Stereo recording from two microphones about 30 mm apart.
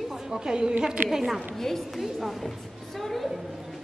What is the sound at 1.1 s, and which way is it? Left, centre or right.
Speech, centre.